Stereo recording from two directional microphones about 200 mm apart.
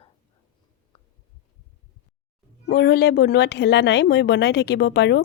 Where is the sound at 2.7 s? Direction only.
50° left (ahead or behind).